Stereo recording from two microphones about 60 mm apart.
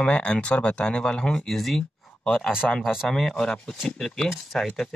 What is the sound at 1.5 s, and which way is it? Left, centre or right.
Speech, centre.